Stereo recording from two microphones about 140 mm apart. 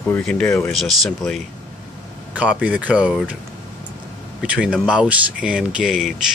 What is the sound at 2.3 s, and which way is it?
Speech, 10° right (ahead or behind).